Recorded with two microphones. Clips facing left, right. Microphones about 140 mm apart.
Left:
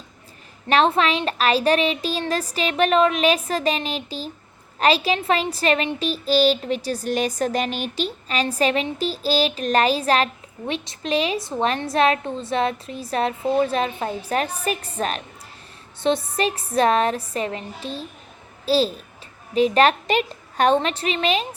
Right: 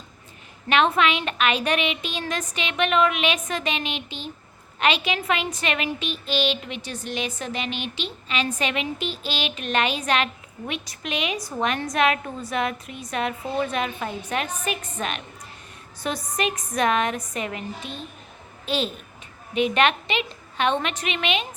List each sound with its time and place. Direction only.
0.7 s a woman's voice: 35° left (ahead or behind)